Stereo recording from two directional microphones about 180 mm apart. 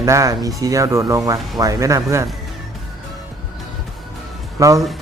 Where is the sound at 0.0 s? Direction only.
15° right (ahead or behind).